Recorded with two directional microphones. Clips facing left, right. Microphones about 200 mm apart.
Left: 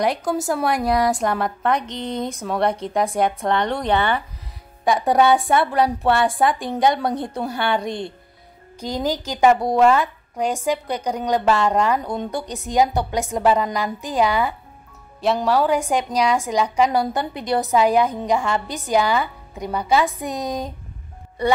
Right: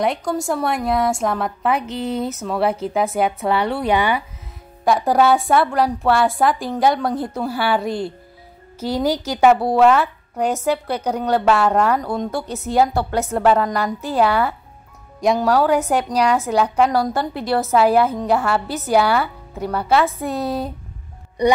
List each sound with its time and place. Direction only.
0.0 s speech: 5° left (ahead or behind)
10.3 s a woman's voice: 10° left (ahead or behind)
11.5 s speech: 5° right (ahead or behind)
12.7 s a woman's voice: 15° left (ahead or behind)
15.1 s a woman's voice: 10° right (ahead or behind)
16.9 s a woman's voice: 20° left (ahead or behind)
17.2 s speech: centre (ahead or behind)
20.2 s a woman's voice: 15° left (ahead or behind)
21.4 s speech: 15° right (ahead or behind)